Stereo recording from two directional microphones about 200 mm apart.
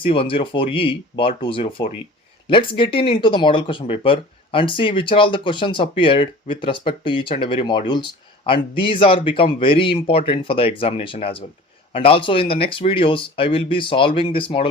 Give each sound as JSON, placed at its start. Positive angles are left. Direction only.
{"t": 0.0, "sound": "speech", "side_deg": 25}